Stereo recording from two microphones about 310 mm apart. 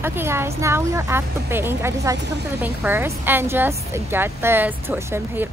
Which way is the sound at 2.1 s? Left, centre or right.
Right.